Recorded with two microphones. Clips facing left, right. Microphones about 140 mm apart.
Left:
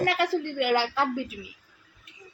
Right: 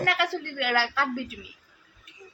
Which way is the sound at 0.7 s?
15° left (ahead or behind).